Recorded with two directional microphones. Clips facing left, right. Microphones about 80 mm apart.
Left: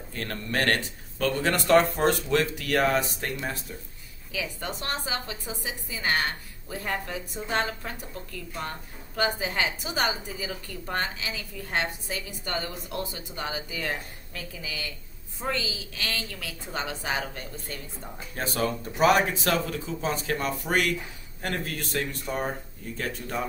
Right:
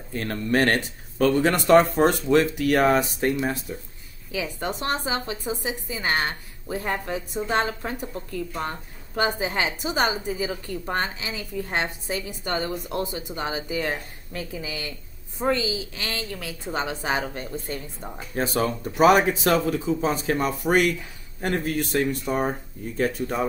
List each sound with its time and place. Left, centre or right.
0.1 s speech: centre
18.3 s speech: centre